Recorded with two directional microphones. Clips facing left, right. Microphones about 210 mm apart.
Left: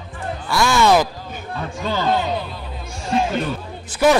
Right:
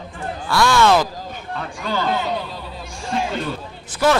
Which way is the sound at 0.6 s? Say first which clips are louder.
Even; 10° left (ahead or behind).